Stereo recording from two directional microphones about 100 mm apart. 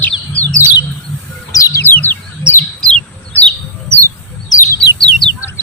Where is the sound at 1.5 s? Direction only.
35° left (ahead or behind).